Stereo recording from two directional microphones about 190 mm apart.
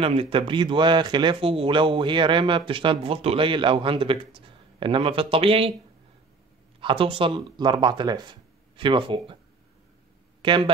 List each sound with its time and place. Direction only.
0.0 s speech: 30° right (ahead or behind)
6.8 s speech: 25° right (ahead or behind)
10.4 s speech: 25° right (ahead or behind)